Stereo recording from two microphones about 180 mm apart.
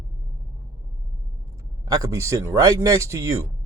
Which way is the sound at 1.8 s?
20° right (ahead or behind).